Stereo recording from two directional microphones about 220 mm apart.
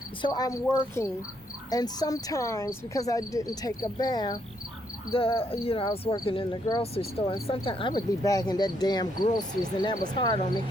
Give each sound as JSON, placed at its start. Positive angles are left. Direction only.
{"t": 0.2, "sound": "speech", "side_deg": 15}